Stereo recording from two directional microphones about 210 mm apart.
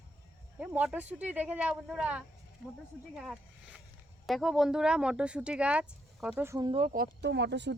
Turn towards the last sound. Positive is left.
turn(degrees=-55)  # may be behind; listen again after turning